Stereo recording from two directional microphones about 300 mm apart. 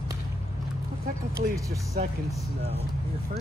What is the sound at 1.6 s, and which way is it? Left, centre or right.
Speech, centre.